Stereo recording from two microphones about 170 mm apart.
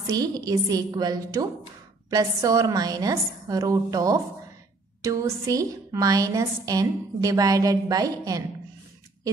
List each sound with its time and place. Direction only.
0.0 s a woman's voice: 20° right (ahead or behind)